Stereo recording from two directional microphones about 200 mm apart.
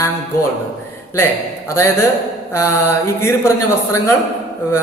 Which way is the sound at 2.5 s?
15° left (ahead or behind).